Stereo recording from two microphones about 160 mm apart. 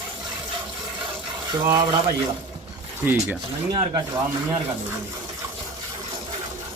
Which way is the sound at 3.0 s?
10° right (ahead or behind).